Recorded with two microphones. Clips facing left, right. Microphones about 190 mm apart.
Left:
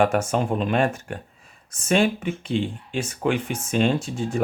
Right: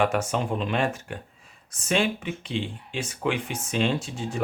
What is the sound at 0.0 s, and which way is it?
Speech, 45° left (ahead or behind).